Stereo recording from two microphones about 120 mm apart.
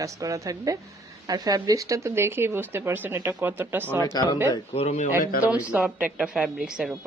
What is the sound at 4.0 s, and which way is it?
Speech, 30° left (ahead or behind).